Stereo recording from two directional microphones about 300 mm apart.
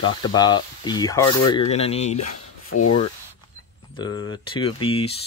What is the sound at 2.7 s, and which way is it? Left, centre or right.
Sanding, left.